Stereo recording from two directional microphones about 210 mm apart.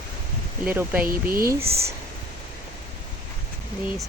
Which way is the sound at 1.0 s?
45° right (ahead or behind).